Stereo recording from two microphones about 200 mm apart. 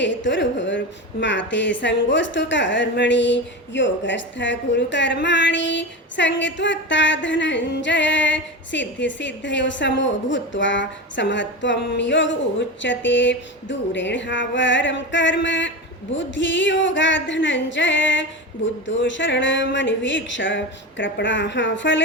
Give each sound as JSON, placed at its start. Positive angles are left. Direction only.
{"t": 0.0, "sound": "a woman's voice", "side_deg": 65}